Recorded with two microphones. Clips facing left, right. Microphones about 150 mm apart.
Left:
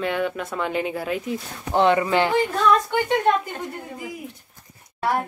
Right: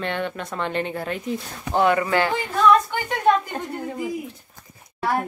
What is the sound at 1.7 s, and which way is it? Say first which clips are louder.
Speech: left 1 dB; 20° left (ahead or behind).